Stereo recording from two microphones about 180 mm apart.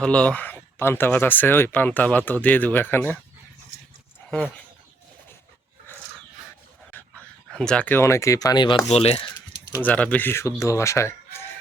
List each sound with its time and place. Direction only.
0.0 s speech: 5° left (ahead or behind)
4.3 s speech: centre (ahead or behind)
7.5 s speech: 5° left (ahead or behind); by 9.8 s 25° left (ahead or behind)
9.8 s speech: 10° left (ahead or behind)